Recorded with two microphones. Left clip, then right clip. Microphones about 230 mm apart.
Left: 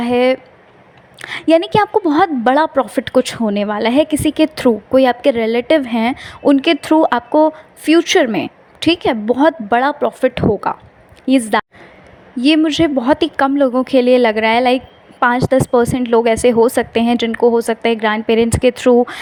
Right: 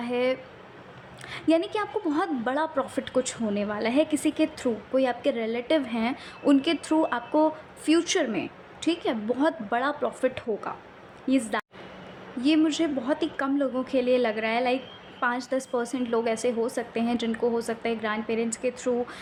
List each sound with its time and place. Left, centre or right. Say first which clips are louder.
0.0 s a woman's voice: left 13 dB; left